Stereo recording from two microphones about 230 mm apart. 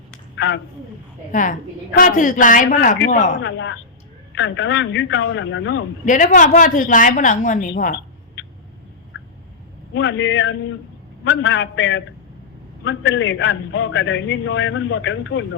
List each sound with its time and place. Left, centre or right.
0.3 s speech: left
1.3 s a woman's voice: left
3.4 s a woman's voice: left
6.1 s a woman's voice: left
9.9 s a man's voice: left